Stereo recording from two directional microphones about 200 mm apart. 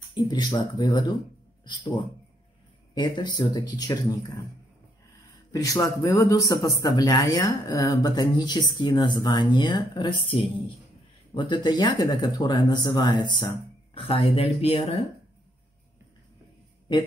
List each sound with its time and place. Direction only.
0.1 s speech: 20° left (ahead or behind)
2.9 s speech: 20° left (ahead or behind)
5.5 s speech: 15° left (ahead or behind)
11.3 s speech: 25° left (ahead or behind)